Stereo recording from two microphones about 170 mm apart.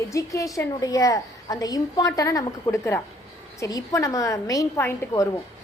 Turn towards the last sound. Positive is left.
turn(degrees=15)  # may be behind; listen again after turning